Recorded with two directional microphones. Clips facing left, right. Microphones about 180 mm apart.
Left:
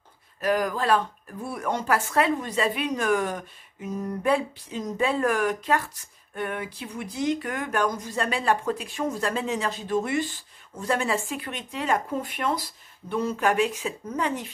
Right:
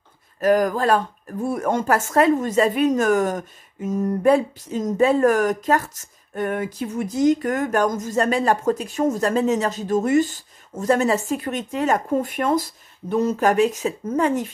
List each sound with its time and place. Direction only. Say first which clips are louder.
0.4 s speech: right 7 dB; 45° right (ahead or behind)